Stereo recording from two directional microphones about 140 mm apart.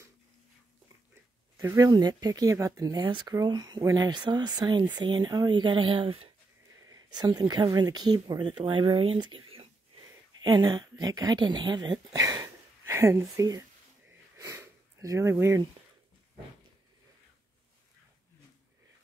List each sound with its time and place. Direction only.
1.6 s speech: 25° right (ahead or behind); by 6.3 s 40° right (ahead or behind)
6.9 s speech: 30° right (ahead or behind)
14.3 s sniff: 15° right (ahead or behind)